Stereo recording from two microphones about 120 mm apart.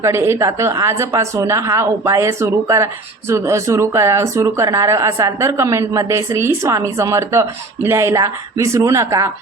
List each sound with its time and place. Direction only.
0.0 s speech: 20° right (ahead or behind)